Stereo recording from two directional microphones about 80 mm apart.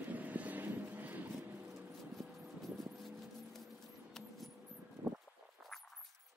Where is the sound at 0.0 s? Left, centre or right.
Centre.